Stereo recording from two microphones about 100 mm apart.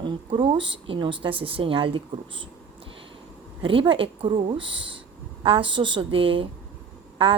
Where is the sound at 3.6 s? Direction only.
60° right (ahead or behind).